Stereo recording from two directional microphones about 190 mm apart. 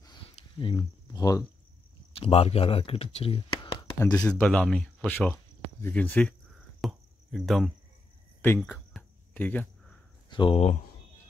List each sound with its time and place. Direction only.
0.0 s a sound: 25° left (ahead or behind)
2.1 s speech: 30° left (ahead or behind)
4.0 s speech: 5° left (ahead or behind)
6.8 s cricket: centre (ahead or behind)
10.3 s speech: 30° left (ahead or behind)